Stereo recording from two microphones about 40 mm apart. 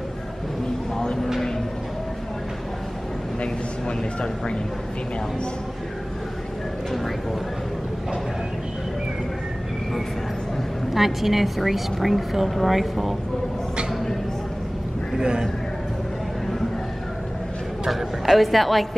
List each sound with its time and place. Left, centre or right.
0.9 s a sound: centre
10.9 s a woman's voice: centre
15.1 s a man's voice: centre
17.8 s speech: centre